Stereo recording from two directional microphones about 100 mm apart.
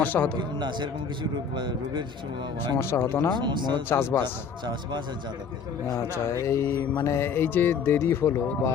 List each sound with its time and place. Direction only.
0.0 s a man's voice: 15° left (ahead or behind)
0.3 s speech: 50° right (ahead or behind)
2.7 s speech: 25° left (ahead or behind)
3.4 s speech: 50° right (ahead or behind)
3.8 s speech: 25° left (ahead or behind)
4.2 s speech: 50° right (ahead or behind)
6.2 s speech: 30° left (ahead or behind)